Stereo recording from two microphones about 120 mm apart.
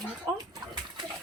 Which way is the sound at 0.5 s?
40° right (ahead or behind).